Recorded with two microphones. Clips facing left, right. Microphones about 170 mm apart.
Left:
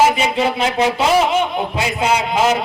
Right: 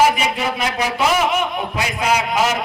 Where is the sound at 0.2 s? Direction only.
25° left (ahead or behind).